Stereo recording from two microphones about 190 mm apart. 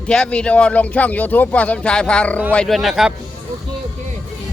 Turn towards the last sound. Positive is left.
turn(degrees=0)  # may be behind; listen again after turning